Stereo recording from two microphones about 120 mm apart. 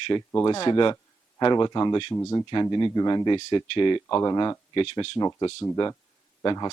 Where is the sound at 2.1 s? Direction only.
20° left (ahead or behind).